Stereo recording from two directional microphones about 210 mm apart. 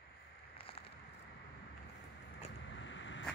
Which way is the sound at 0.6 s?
25° left (ahead or behind).